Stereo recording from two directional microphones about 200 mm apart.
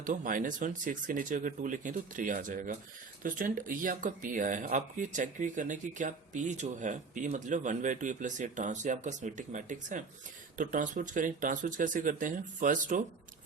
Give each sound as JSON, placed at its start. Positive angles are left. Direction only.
{"t": 0.0, "sound": "speech", "side_deg": -40}